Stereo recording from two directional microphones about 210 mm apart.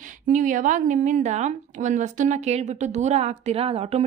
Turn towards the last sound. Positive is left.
turn(degrees=-30)  # may be behind; listen again after turning